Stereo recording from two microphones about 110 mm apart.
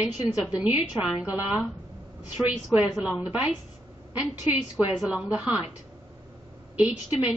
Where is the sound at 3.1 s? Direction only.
10° right (ahead or behind).